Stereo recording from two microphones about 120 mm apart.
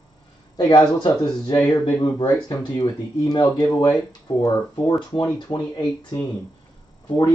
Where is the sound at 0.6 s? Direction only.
40° left (ahead or behind).